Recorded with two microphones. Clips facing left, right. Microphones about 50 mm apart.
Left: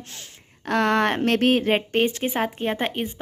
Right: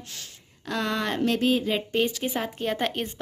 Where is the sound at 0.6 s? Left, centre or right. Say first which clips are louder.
Left 8 dB; left.